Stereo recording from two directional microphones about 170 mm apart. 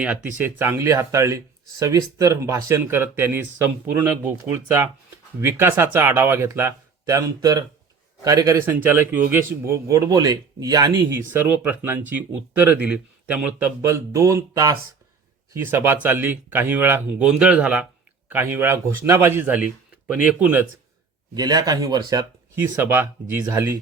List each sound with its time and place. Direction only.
0.0 s speech: 10° right (ahead or behind)
11.3 s speech: 10° right (ahead or behind)
21.3 s speech: 25° right (ahead or behind)
22.5 s speech: 15° right (ahead or behind)